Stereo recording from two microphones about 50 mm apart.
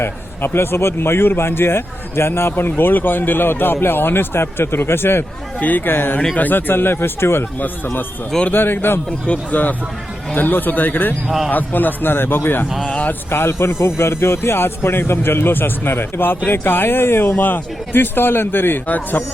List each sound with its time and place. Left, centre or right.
0.0 s a man's voice: left
5.5 s a man's voice: left
8.5 s a man's voice: left
9.0 s speech: left
11.3 s speech: centre
11.5 s a man's voice: left
12.6 s speech: centre
13.1 s a man's voice: left
18.9 s speech: left